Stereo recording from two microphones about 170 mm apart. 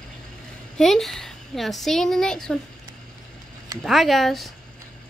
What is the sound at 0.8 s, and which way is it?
Speech, centre (ahead or behind).